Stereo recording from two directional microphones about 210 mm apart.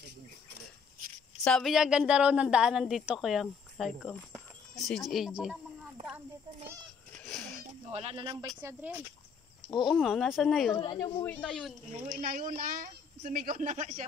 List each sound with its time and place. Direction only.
1.4 s speech: centre (ahead or behind)
7.2 s a sound: 5° left (ahead or behind)
7.9 s speech: 30° right (ahead or behind)
8.5 s speech: 10° right (ahead or behind)
10.7 s speech: 20° left (ahead or behind)
11.2 s speech: centre (ahead or behind)
11.9 s speech: 40° right (ahead or behind)